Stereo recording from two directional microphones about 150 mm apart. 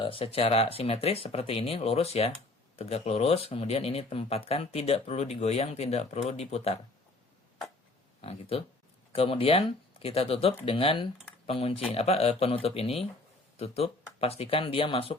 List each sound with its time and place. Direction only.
0.0 s speech: 35° left (ahead or behind)
8.2 s speech: 40° left (ahead or behind)